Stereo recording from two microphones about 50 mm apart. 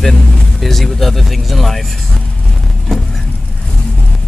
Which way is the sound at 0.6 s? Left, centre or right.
Centre.